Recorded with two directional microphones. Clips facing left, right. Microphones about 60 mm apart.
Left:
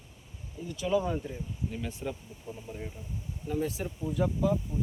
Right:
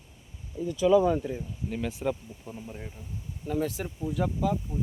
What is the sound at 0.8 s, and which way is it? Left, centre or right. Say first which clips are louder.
Speech: right 7 dB; right.